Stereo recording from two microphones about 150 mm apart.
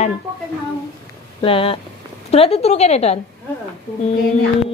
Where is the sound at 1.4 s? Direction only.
40° left (ahead or behind).